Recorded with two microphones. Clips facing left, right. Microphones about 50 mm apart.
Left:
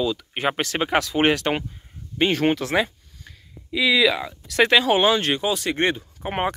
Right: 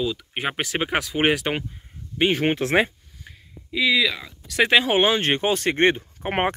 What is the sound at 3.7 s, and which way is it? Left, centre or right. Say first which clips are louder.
Speech: left 2 dB; centre.